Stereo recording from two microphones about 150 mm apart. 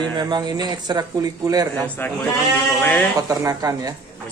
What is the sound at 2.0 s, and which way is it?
Speech, 15° left (ahead or behind).